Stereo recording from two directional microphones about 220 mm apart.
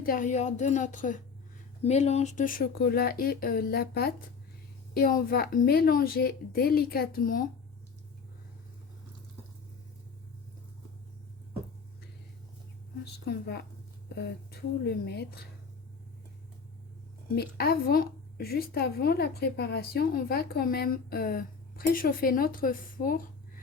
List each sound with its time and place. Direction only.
0.0 s a woman's voice: 40° left (ahead or behind)
13.1 s a woman's voice: 50° left (ahead or behind)
17.3 s a woman's voice: 45° left (ahead or behind)